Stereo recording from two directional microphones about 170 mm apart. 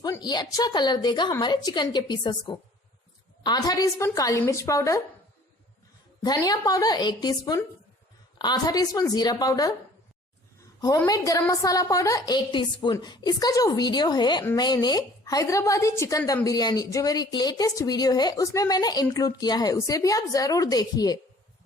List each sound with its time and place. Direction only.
0.0 s a woman's voice: 25° left (ahead or behind)
6.2 s a woman's voice: 25° left (ahead or behind)
10.8 s a woman's voice: 20° left (ahead or behind)